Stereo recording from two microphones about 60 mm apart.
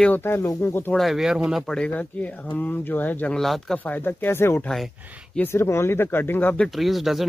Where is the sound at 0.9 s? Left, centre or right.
Centre.